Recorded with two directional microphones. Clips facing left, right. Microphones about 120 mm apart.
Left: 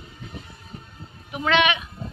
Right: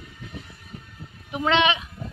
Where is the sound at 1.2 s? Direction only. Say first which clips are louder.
Even; 25° right (ahead or behind).